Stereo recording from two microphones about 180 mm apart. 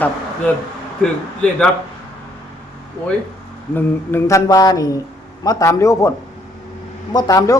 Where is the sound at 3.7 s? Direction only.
15° left (ahead or behind).